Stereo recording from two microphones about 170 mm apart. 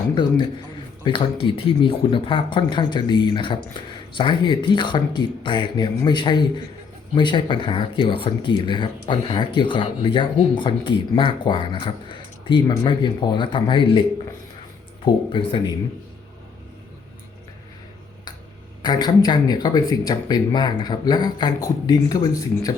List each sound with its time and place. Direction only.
0.1 s speech: 25° left (ahead or behind)
15.0 s speech: 30° left (ahead or behind)
18.8 s speech: 25° left (ahead or behind)